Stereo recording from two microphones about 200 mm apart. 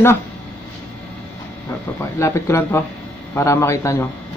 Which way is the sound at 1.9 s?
15° left (ahead or behind).